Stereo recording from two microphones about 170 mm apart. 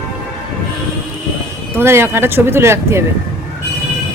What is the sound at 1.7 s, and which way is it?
Speech, 15° right (ahead or behind).